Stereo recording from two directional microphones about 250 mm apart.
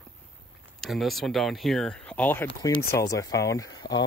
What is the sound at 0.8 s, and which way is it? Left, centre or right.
Speech, centre.